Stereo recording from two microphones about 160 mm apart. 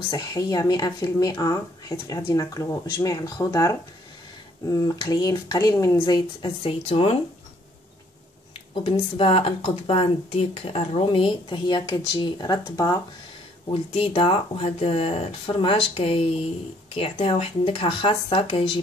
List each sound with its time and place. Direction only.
0.1 s speech: 25° left (ahead or behind)
8.7 s speech: 35° left (ahead or behind)
13.7 s speech: 35° left (ahead or behind)